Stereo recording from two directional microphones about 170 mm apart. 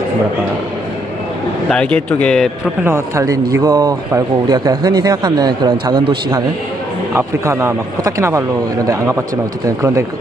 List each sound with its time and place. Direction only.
1.7 s speech: 5° left (ahead or behind)
2.8 s speech: 15° right (ahead or behind)